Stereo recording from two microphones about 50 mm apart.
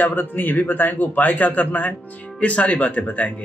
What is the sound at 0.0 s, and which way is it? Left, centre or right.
A man's voice, left.